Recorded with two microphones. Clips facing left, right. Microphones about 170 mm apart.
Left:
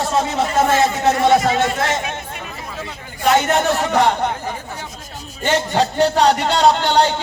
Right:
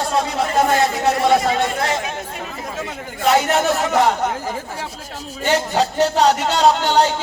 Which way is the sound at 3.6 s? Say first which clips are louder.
Even; centre (ahead or behind).